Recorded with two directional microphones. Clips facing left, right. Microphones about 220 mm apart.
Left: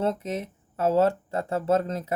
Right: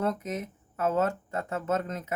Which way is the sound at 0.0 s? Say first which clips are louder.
Left 3 dB; 30° left (ahead or behind).